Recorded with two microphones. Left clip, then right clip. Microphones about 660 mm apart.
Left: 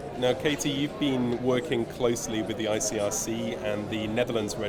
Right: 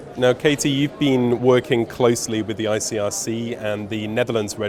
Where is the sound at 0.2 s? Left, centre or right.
Right.